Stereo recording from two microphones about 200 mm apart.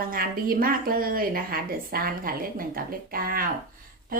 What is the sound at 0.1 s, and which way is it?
A woman's voice, 45° right (ahead or behind).